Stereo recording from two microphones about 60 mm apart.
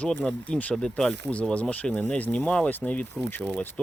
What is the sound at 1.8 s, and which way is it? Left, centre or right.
Speech, left.